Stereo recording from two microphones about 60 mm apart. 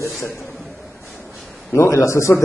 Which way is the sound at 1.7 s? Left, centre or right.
Left.